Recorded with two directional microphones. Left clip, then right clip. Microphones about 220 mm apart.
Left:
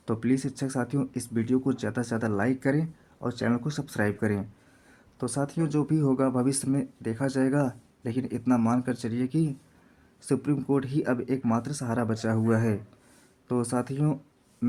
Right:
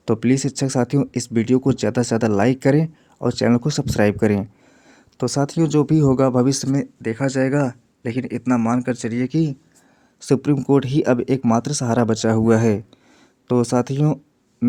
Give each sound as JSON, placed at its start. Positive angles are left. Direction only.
{"t": 0.0, "sound": "speech", "side_deg": -35}
{"t": 10.2, "sound": "speech", "side_deg": -35}
{"t": 14.6, "sound": "music", "side_deg": -30}